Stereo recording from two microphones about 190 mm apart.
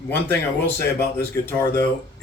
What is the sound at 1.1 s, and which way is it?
A man's voice, 10° left (ahead or behind).